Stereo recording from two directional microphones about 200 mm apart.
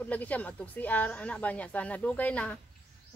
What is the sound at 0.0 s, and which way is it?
A woman's voice, 10° left (ahead or behind).